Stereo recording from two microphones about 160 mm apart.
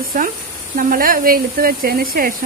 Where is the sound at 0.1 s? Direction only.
65° right (ahead or behind).